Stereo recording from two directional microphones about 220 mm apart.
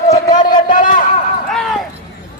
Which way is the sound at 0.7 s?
35° left (ahead or behind).